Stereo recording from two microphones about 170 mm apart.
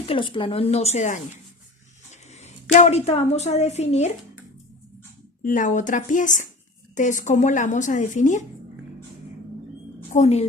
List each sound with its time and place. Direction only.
0.0 s a woman's voice: 30° left (ahead or behind)
2.4 s a woman's voice: 40° left (ahead or behind)
5.4 s speech: 50° left (ahead or behind)
10.1 s a woman's voice: 40° left (ahead or behind)